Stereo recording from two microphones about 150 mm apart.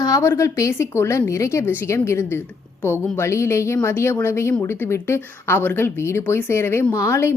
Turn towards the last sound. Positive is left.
turn(degrees=20)  # may be behind; listen again after turning